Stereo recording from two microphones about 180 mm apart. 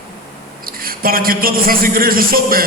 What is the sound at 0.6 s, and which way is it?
A man's voice, 55° right (ahead or behind).